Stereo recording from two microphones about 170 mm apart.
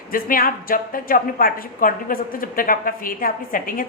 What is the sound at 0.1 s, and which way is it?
A woman's voice, 55° left (ahead or behind).